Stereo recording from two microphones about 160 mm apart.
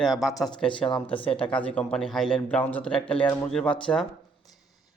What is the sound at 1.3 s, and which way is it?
A man's voice, 5° left (ahead or behind).